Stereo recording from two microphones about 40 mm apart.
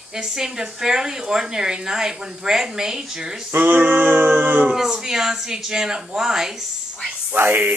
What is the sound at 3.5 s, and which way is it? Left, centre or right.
Speech, right.